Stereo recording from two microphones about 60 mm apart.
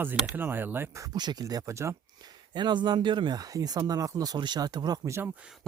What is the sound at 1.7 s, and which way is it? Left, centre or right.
Speech, right.